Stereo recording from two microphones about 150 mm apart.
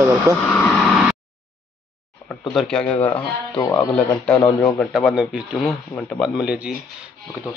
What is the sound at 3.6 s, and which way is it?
Speech, 20° left (ahead or behind).